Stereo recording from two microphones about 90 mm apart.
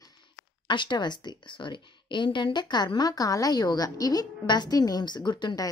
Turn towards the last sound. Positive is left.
turn(degrees=55)  # may be behind; listen again after turning